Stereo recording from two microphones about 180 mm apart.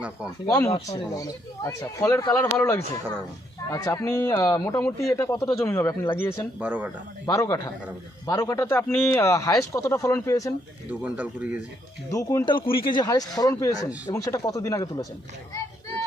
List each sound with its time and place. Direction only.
0.4 s speech: 20° left (ahead or behind)
3.7 s speech: 15° left (ahead or behind)
6.6 s speech: 10° right (ahead or behind)
7.3 s speech: 15° left (ahead or behind)
10.8 s speech: 10° right (ahead or behind)
12.1 s speech: 20° left (ahead or behind)
12.5 s speech: 30° left (ahead or behind)